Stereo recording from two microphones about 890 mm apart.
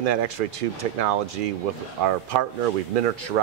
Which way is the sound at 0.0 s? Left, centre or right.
Right.